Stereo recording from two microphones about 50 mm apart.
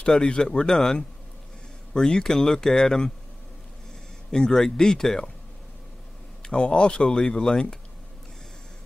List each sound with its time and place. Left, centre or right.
0.0 s speech: centre
4.3 s speech: centre
6.4 s speech: left